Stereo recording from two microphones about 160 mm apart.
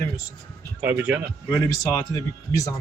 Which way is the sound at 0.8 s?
15° right (ahead or behind).